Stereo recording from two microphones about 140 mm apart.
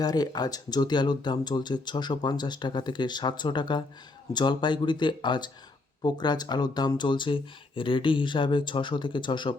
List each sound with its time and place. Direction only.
0.0 s speech: 30° left (ahead or behind)